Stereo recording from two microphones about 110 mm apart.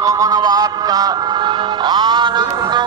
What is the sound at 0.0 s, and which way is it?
Music, 30° right (ahead or behind).